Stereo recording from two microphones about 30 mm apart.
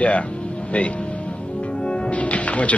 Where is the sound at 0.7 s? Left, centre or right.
Left.